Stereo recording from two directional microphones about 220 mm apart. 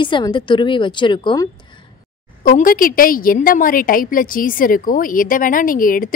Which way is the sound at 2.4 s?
40° left (ahead or behind).